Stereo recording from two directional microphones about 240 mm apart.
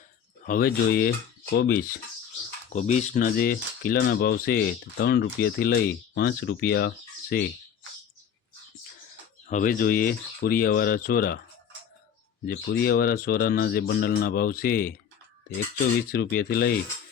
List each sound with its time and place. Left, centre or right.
0.4 s cutlery: left
2.7 s cutlery: left
6.1 s speech: left
9.5 s cutlery: left
12.5 s cutlery: left
16.1 s cutlery: left